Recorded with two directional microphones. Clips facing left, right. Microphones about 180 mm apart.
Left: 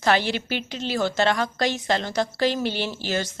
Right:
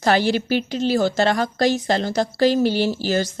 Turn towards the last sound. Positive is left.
turn(degrees=-40)  # may be behind; listen again after turning